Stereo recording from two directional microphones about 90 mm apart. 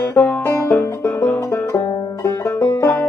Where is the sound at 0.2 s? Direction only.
15° left (ahead or behind).